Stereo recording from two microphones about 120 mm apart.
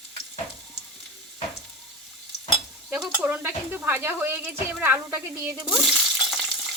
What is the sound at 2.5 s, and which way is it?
Stir, 5° right (ahead or behind).